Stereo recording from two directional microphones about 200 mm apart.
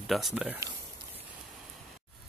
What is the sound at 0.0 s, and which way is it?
Speech, centre (ahead or behind).